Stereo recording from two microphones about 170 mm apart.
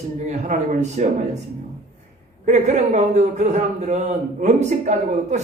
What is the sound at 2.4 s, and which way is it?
Speech, 45° right (ahead or behind).